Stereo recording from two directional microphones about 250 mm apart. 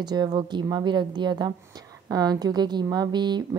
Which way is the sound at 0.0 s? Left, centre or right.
Centre.